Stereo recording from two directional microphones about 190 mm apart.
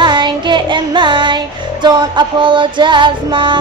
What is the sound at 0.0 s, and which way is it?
Music, 25° right (ahead or behind).